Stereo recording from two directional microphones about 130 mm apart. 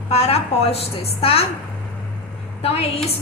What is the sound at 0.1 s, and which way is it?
A woman's voice, 50° left (ahead or behind).